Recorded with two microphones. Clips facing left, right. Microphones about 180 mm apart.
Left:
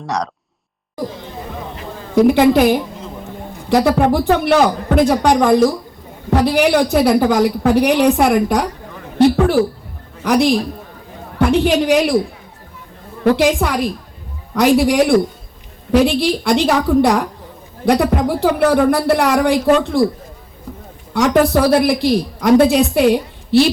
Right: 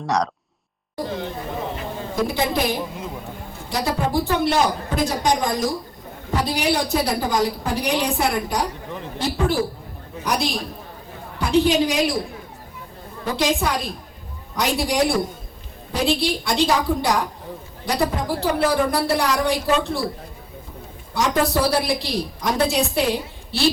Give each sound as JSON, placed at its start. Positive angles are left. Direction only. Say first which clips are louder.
{"t": 2.1, "sound": "a woman's voice", "louder": "left 12 dB", "side_deg": 70}
{"t": 13.2, "sound": "a woman's voice", "louder": "left 8 dB", "side_deg": 70}
{"t": 21.1, "sound": "a woman's voice", "louder": "left 7 dB", "side_deg": 70}